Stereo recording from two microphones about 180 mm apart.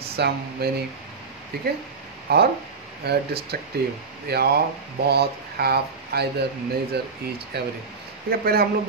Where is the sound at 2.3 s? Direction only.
60° right (ahead or behind).